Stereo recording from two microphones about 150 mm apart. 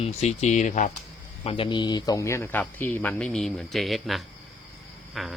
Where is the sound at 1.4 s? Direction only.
35° left (ahead or behind).